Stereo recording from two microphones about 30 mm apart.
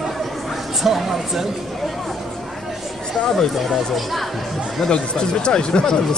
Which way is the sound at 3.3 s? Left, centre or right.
Centre.